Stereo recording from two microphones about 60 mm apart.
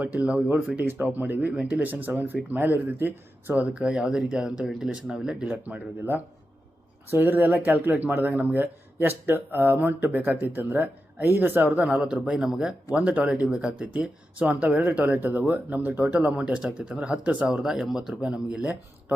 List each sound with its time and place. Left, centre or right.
0.0 s speech: right
3.5 s speech: right
5.6 s speech: right
12.0 s speech: right
12.3 s speech: centre; by 16.0 s right
16.3 s speech: centre